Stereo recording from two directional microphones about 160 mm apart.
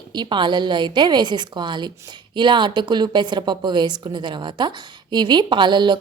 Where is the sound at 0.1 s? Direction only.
30° right (ahead or behind).